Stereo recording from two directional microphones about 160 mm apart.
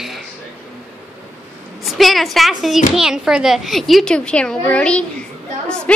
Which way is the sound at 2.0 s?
Centre (ahead or behind).